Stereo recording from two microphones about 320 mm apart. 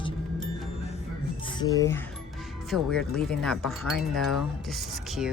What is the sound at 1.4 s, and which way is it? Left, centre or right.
Speech, centre.